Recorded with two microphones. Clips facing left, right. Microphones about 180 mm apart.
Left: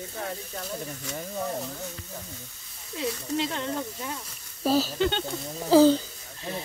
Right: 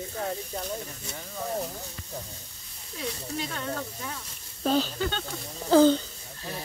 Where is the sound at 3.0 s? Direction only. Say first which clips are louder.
Left 5 dB; 25° left (ahead or behind).